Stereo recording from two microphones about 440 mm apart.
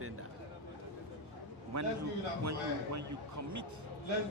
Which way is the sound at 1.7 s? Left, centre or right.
Right.